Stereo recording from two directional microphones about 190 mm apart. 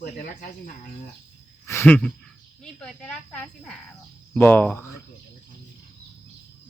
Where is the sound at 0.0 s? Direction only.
45° left (ahead or behind).